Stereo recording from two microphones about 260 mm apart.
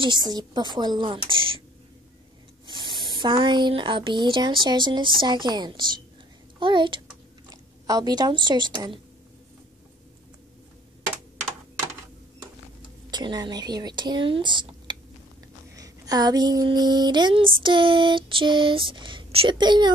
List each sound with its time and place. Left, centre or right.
0.0 s speech: centre
2.7 s a woman's voice: centre
13.1 s a woman's voice: centre